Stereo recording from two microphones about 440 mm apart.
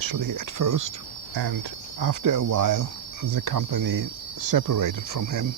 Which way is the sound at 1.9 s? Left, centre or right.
Right.